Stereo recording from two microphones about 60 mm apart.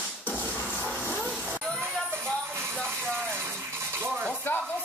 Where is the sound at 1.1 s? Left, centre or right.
Centre.